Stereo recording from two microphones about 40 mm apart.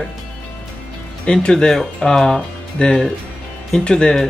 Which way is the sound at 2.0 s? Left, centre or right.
Centre.